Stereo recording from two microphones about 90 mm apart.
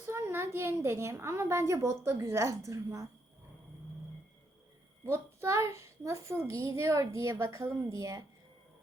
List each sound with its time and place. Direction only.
0.0 s a child's voice: 30° right (ahead or behind)
5.0 s a child's voice: 30° right (ahead or behind)